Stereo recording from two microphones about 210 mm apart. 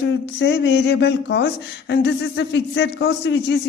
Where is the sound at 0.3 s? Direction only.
55° left (ahead or behind).